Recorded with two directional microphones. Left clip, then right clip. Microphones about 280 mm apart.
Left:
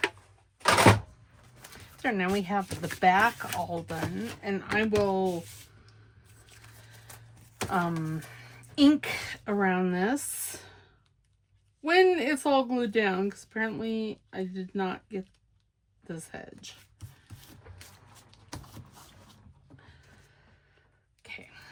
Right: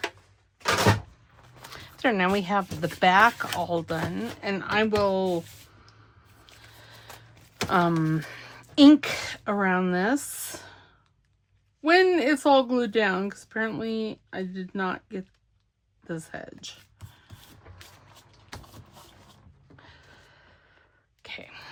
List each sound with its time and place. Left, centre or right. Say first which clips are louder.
1.7 s speech: right 6 dB; centre
7.7 s speech: right 7 dB; right
11.8 s speech: right 3 dB; centre
21.2 s whispering: right 4 dB; centre